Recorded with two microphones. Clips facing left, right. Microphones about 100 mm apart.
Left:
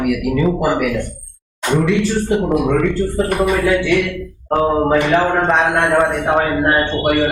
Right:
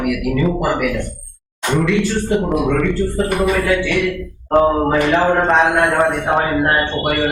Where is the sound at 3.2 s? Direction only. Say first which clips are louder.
Left 1 dB; 5° left (ahead or behind).